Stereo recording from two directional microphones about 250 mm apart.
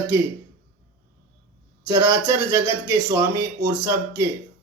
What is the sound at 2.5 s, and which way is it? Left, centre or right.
Speech, centre.